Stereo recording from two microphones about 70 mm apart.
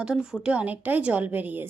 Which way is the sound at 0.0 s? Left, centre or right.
Centre.